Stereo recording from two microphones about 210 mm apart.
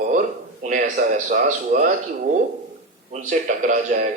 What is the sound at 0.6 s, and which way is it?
Speech, 35° right (ahead or behind).